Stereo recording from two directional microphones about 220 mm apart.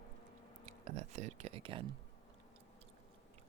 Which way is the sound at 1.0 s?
30° right (ahead or behind).